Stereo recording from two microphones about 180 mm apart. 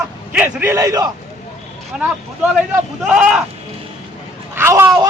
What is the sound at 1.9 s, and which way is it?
Speech, 5° right (ahead or behind).